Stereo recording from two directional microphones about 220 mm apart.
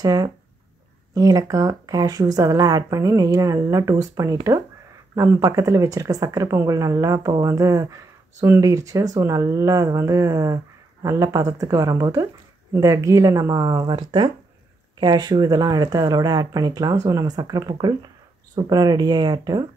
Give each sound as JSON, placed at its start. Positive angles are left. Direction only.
{"t": 0.0, "sound": "speech", "side_deg": -15}